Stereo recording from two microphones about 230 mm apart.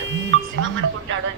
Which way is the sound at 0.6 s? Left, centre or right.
Right.